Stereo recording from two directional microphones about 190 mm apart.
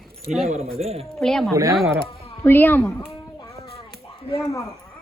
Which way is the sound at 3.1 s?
15° left (ahead or behind).